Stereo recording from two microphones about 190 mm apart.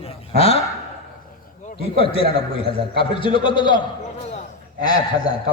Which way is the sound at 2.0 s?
30° left (ahead or behind).